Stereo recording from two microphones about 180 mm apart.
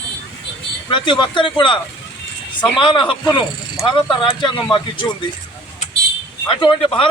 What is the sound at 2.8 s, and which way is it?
Speech, 25° left (ahead or behind).